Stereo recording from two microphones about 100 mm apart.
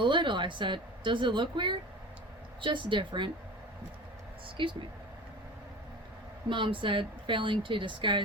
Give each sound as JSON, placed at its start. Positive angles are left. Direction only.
{"t": 0.0, "sound": "speech", "side_deg": -55}
{"t": 4.4, "sound": "speech", "side_deg": -55}
{"t": 6.5, "sound": "speech", "side_deg": -55}